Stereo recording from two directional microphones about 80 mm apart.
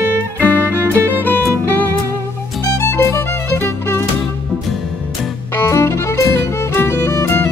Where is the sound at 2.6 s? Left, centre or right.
Left.